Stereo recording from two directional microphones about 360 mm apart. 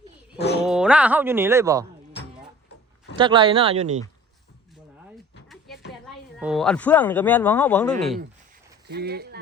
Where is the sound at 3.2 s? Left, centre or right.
Centre.